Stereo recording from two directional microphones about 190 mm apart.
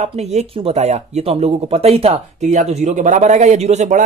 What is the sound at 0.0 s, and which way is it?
Speech, 35° right (ahead or behind).